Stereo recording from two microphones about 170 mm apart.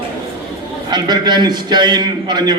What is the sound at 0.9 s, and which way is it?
A man's voice, 25° right (ahead or behind).